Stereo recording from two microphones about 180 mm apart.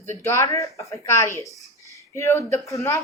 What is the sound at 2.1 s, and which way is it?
Speech, 15° left (ahead or behind).